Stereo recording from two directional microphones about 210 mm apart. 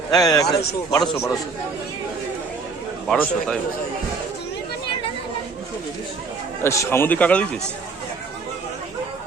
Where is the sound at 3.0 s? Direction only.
5° left (ahead or behind).